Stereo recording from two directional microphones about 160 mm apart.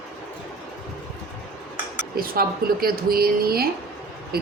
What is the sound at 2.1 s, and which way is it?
Speech, 70° right (ahead or behind).